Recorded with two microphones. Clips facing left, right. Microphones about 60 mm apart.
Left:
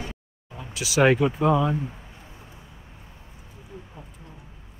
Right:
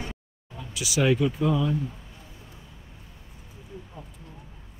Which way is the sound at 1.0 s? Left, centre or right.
Left.